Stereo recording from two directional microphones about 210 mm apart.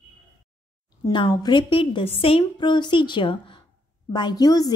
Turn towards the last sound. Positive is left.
turn(degrees=20)  # may be behind; listen again after turning